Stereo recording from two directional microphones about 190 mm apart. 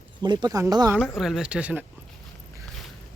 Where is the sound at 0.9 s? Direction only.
Centre (ahead or behind).